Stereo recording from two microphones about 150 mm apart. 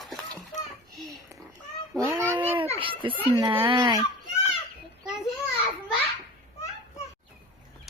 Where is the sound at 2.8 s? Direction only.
35° right (ahead or behind).